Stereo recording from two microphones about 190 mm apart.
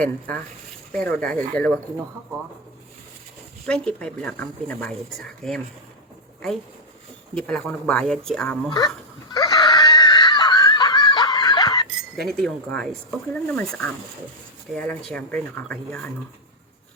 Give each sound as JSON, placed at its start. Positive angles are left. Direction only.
{"t": 0.0, "sound": "speech", "side_deg": 10}
{"t": 3.7, "sound": "speech", "side_deg": 5}
{"t": 7.3, "sound": "speech", "side_deg": 5}
{"t": 9.3, "sound": "screaming", "side_deg": 20}
{"t": 12.2, "sound": "speech", "side_deg": 5}